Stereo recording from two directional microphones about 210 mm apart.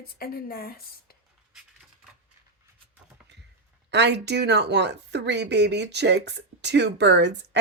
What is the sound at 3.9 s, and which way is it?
Speech, 55° right (ahead or behind).